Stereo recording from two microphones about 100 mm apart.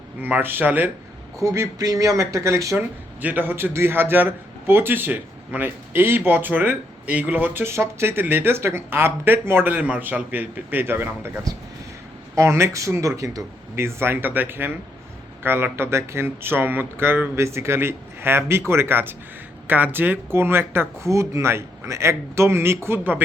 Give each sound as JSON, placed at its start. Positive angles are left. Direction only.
{"t": 0.2, "sound": "a man's voice", "side_deg": -20}
{"t": 1.4, "sound": "speech", "side_deg": -30}
{"t": 2.7, "sound": "a man's voice", "side_deg": -20}
{"t": 11.5, "sound": "a man's voice", "side_deg": -35}